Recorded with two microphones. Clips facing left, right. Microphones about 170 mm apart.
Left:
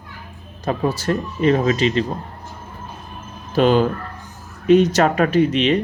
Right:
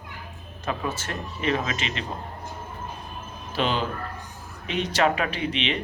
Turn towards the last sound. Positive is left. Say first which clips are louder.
# left 12 dB
turn(degrees=40)  # may be behind; listen again after turning